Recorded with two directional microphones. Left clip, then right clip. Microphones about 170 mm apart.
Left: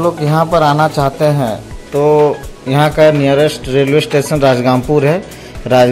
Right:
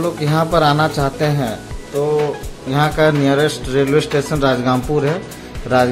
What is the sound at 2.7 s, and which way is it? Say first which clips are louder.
Speech: left 6 dB; 20° left (ahead or behind).